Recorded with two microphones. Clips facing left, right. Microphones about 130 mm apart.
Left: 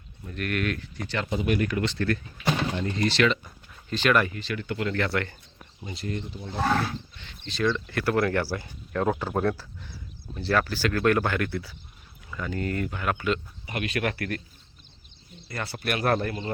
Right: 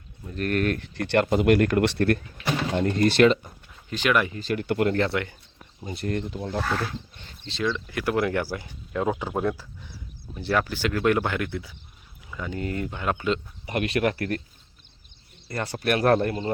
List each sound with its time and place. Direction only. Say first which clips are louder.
0.3 s speech: right 4 dB; 35° right (ahead or behind)
0.9 s speech: right 8 dB; 65° right (ahead or behind); by 3.3 s 50° right (ahead or behind)
3.8 s speech: even; 10° right (ahead or behind)
4.4 s speech: right 6 dB; 45° right (ahead or behind)
4.9 s speech: right 3 dB; 25° right (ahead or behind)
5.9 s speech: right 5 dB; 55° right (ahead or behind)
7.7 s speech: even; 10° right (ahead or behind)
13.7 s speech: right 5 dB; 40° right (ahead or behind)
15.4 s speech: right 5 dB; 35° right (ahead or behind)